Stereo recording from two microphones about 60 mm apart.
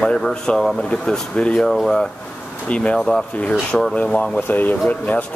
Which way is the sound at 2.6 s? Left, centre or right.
Left.